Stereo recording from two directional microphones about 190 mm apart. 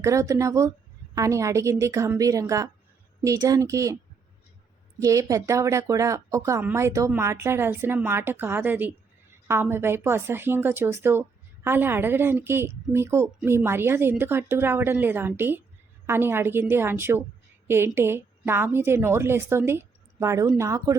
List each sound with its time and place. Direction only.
0.0 s a woman's voice: 15° right (ahead or behind)
4.9 s a woman's voice: 15° right (ahead or behind)